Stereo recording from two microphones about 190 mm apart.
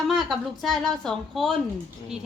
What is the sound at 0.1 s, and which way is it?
Speech, centre (ahead or behind).